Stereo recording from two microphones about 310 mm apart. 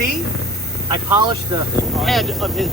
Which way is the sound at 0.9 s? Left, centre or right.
Centre.